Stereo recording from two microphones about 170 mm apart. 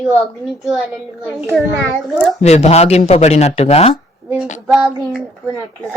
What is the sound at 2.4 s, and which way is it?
Speech, 40° left (ahead or behind).